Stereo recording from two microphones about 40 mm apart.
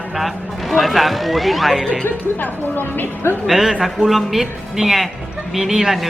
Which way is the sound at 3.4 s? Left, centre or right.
Centre.